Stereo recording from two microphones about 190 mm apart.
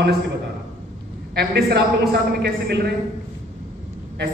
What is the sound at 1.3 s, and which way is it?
Speech, 60° right (ahead or behind).